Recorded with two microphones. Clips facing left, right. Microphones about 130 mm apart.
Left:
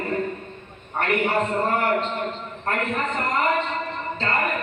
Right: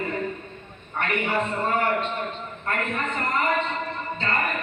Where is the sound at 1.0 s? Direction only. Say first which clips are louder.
Left 3 dB; 40° left (ahead or behind).